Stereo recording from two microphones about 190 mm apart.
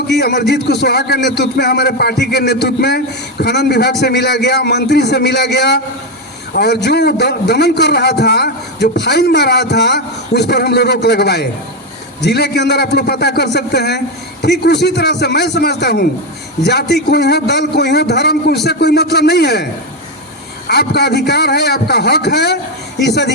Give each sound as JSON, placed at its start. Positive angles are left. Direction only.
{"t": 0.1, "sound": "a man's voice", "side_deg": 60}
{"t": 20.7, "sound": "a man's voice", "side_deg": 60}